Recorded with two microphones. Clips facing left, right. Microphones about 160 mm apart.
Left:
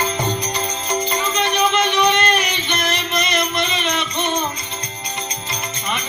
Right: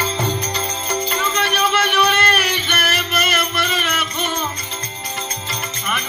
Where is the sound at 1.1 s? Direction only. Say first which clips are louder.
Left 1 dB; 15° left (ahead or behind).